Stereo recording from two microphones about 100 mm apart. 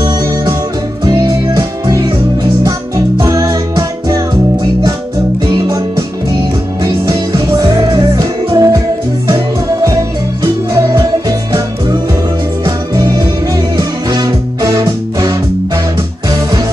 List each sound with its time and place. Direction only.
0.0 s music: 45° right (ahead or behind)
3.2 s music: 40° right (ahead or behind)
5.5 s music: 45° right (ahead or behind)
6.8 s music: 35° right (ahead or behind)
10.4 s music: 35° right (ahead or behind)